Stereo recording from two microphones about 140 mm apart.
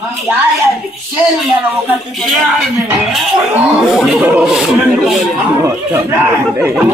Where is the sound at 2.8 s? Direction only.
5° right (ahead or behind).